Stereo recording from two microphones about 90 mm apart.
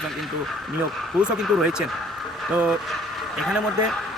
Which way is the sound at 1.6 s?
10° right (ahead or behind).